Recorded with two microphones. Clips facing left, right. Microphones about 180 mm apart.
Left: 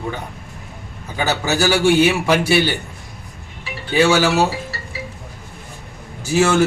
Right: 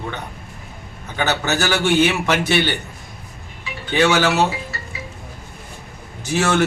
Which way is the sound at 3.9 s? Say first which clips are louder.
Left 2 dB; 10° left (ahead or behind).